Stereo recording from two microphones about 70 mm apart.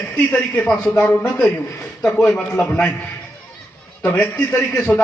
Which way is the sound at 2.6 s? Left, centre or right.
Left.